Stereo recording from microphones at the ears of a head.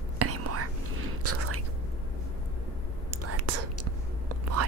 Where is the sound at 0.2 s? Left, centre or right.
Right.